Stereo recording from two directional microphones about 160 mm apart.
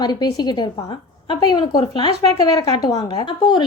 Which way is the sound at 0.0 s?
25° left (ahead or behind).